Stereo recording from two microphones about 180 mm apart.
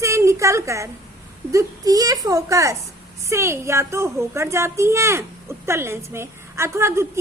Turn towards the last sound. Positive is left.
turn(degrees=-15)  # may be behind; listen again after turning